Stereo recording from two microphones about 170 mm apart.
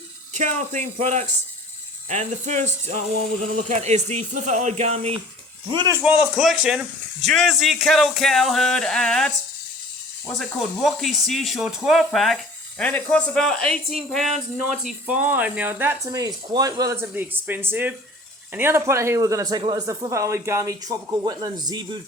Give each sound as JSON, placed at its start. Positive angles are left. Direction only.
{"t": 0.3, "sound": "speech", "side_deg": -45}
{"t": 5.6, "sound": "speech", "side_deg": -25}
{"t": 6.0, "sound": "speech", "side_deg": -5}